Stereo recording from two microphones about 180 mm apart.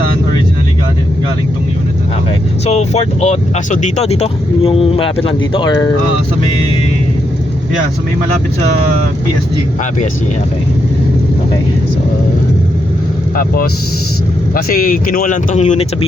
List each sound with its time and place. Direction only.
2.6 s speech: 35° left (ahead or behind)
14.5 s speech: 55° left (ahead or behind)